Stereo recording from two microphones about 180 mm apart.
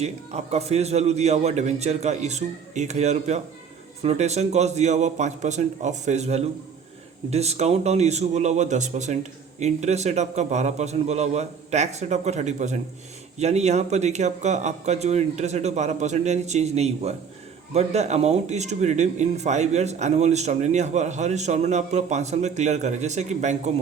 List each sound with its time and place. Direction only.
0.0 s speech: 35° right (ahead or behind)